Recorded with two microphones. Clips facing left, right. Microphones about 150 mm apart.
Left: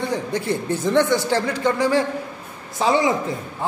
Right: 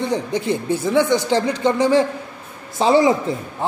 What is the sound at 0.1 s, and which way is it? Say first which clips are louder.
A man's voice: right 2 dB; 15° right (ahead or behind).